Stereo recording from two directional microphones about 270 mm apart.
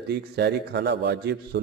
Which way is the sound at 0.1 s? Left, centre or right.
Right.